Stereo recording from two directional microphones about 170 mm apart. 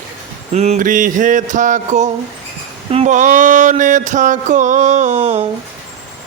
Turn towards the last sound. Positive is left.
turn(degrees=-40)  # may be behind; listen again after turning